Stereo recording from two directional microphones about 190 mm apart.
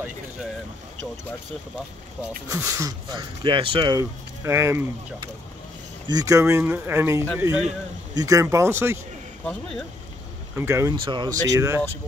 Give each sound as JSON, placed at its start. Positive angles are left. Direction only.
{"t": 2.5, "sound": "speech", "side_deg": -15}
{"t": 4.5, "sound": "speech", "side_deg": -15}
{"t": 9.4, "sound": "speech", "side_deg": 5}
{"t": 10.5, "sound": "speech", "side_deg": -15}